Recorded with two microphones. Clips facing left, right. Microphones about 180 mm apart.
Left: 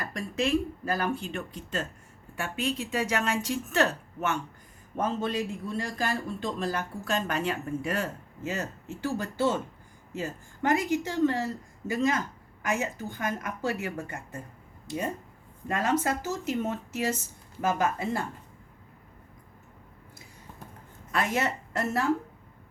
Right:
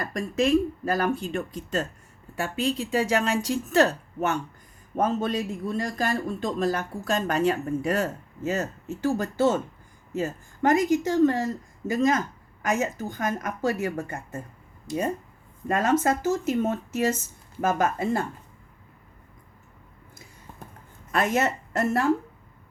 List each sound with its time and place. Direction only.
0.0 s speech: 45° right (ahead or behind)
15.6 s speech: 45° right (ahead or behind)
21.1 s speech: 45° right (ahead or behind)